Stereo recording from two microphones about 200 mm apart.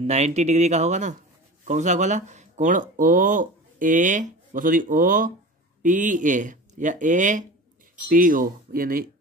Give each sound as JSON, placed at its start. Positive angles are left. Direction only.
{"t": 0.0, "sound": "speech", "side_deg": -35}